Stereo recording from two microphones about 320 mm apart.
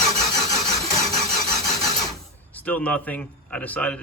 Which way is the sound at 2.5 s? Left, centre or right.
Centre.